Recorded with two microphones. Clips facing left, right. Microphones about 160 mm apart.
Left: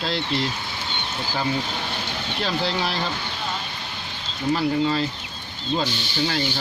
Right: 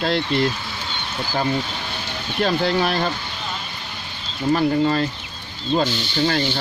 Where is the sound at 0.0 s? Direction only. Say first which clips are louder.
Right 5 dB; 55° right (ahead or behind).